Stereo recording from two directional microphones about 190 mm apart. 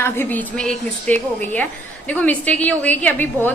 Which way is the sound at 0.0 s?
10° left (ahead or behind).